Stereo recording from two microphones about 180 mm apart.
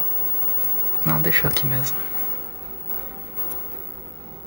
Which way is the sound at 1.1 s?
20° right (ahead or behind).